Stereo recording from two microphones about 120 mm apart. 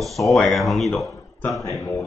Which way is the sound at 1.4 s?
25° left (ahead or behind).